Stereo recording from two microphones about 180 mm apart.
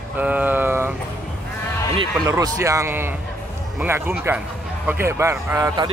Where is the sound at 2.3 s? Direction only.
20° right (ahead or behind).